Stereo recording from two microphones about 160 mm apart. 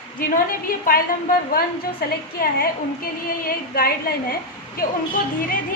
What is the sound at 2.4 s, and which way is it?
A woman's voice, 65° left (ahead or behind).